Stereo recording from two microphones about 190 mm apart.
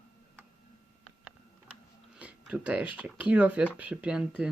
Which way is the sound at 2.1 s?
5° right (ahead or behind).